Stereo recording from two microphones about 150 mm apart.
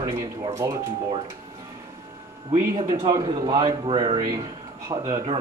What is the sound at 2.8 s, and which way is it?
Speech, 35° right (ahead or behind).